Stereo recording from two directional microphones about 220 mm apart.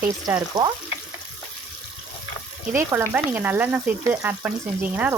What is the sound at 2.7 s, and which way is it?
Frying, 10° right (ahead or behind).